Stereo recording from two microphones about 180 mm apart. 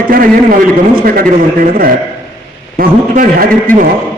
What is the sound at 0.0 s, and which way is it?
A man's voice, 50° right (ahead or behind).